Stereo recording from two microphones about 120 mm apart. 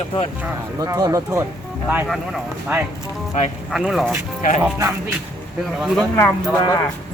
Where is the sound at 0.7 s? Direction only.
30° right (ahead or behind).